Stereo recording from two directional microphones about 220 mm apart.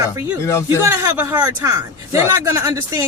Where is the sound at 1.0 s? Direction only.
10° right (ahead or behind).